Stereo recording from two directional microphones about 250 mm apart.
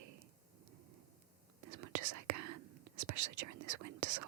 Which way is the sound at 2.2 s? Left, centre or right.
Right.